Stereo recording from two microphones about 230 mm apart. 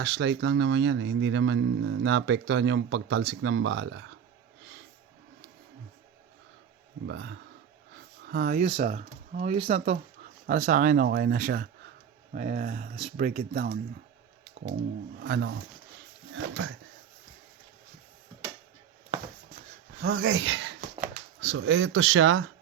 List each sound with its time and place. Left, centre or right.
0.0 s speech: right
7.1 s speech: right
15.2 s speech: right
16.3 s speech: right
20.0 s speech: right